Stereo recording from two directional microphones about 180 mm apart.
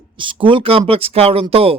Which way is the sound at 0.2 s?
30° right (ahead or behind).